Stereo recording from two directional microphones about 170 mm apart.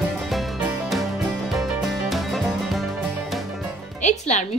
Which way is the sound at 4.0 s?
45° left (ahead or behind).